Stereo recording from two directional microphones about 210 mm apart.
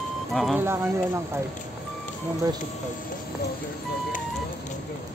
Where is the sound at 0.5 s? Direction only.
10° right (ahead or behind).